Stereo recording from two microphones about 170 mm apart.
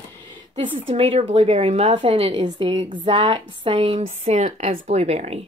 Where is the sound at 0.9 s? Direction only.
35° right (ahead or behind).